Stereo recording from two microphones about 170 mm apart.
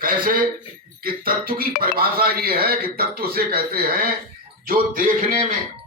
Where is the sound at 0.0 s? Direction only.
55° right (ahead or behind).